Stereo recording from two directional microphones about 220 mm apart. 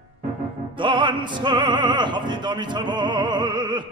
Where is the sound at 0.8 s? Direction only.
20° right (ahead or behind).